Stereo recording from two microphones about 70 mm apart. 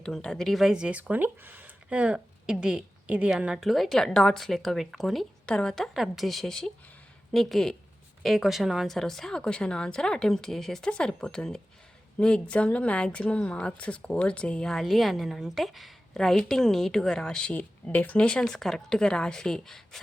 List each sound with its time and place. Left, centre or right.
0.0 s speech: centre
3.7 s a woman's voice: centre
5.5 s a woman's voice: centre
17.5 s a woman's voice: left